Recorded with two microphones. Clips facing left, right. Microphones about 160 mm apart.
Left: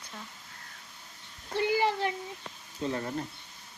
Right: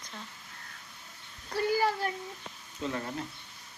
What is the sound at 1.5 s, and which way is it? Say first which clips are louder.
Speech: left 1 dB; 20° left (ahead or behind).